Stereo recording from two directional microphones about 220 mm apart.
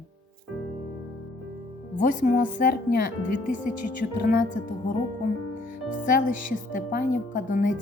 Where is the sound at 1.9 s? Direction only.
35° left (ahead or behind).